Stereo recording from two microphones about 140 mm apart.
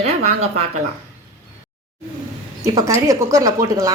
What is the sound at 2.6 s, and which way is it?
A woman's voice, 20° right (ahead or behind).